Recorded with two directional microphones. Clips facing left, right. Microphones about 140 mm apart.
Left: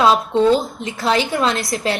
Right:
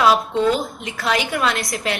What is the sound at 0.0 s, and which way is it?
A woman's voice, 30° left (ahead or behind).